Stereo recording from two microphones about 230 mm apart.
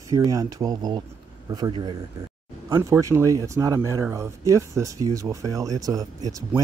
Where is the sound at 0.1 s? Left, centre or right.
Centre.